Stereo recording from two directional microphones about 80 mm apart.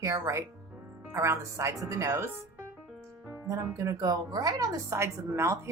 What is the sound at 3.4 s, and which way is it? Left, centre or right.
A woman's voice, right.